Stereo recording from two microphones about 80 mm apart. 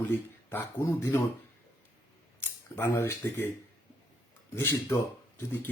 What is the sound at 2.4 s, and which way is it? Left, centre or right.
Speech, left.